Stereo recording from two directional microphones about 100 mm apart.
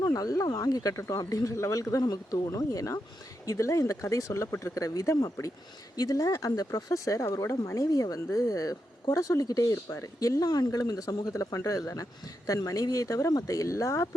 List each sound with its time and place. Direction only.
0.0 s speech: 35° left (ahead or behind)